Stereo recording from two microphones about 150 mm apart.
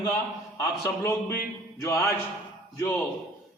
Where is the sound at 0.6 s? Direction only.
20° left (ahead or behind).